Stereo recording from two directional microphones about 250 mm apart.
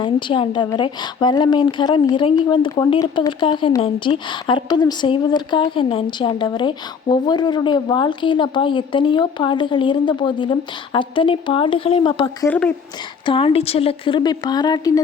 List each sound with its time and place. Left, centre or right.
0.0 s speech: centre
12.5 s speech: centre
13.2 s speech: left